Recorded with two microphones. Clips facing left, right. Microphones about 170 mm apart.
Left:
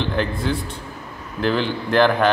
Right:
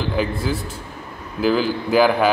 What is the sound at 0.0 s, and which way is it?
A man's voice, 5° right (ahead or behind).